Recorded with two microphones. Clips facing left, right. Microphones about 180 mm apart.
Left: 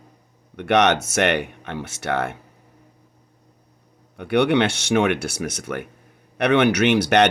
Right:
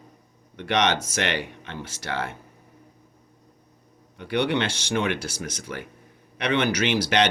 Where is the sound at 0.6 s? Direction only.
60° left (ahead or behind).